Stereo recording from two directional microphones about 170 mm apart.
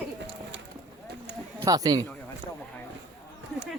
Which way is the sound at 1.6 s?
20° right (ahead or behind).